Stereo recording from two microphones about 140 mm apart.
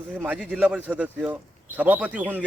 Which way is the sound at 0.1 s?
15° right (ahead or behind).